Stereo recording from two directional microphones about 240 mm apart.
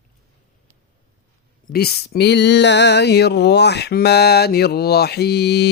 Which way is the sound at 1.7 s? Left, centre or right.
Left.